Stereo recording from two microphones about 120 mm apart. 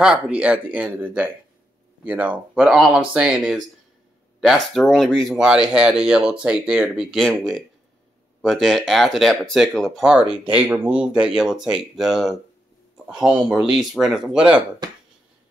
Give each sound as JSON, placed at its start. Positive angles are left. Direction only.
{"t": 0.0, "sound": "speech", "side_deg": -10}
{"t": 14.8, "sound": "speech", "side_deg": -35}